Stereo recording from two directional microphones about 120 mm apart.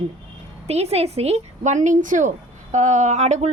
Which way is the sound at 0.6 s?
60° right (ahead or behind).